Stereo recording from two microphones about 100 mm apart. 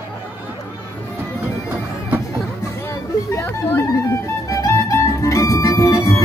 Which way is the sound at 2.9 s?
30° left (ahead or behind).